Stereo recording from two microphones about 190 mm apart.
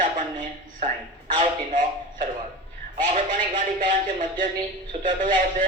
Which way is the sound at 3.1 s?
45° right (ahead or behind).